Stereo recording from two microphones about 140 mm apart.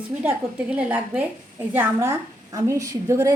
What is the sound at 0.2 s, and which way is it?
A woman's voice, 10° right (ahead or behind).